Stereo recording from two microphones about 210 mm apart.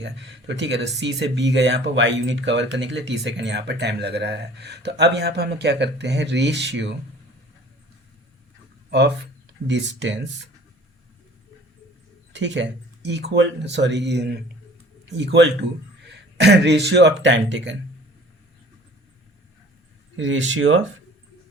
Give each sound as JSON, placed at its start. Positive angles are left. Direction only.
{"t": 0.0, "sound": "speech", "side_deg": -60}
{"t": 8.9, "sound": "speech", "side_deg": -55}
{"t": 12.3, "sound": "speech", "side_deg": -60}
{"t": 20.1, "sound": "speech", "side_deg": -65}